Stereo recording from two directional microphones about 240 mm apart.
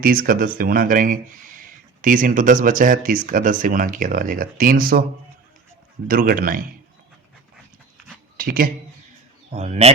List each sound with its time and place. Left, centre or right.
0.0 s speech: right
6.1 s speech: right
8.4 s speech: right